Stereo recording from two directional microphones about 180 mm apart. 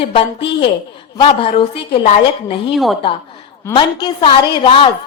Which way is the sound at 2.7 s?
Centre (ahead or behind).